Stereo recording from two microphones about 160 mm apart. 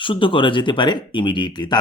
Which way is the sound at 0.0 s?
30° left (ahead or behind).